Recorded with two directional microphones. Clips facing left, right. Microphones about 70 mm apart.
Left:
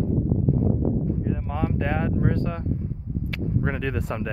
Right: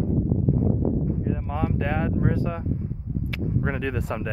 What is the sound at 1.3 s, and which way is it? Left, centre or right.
Speech, centre.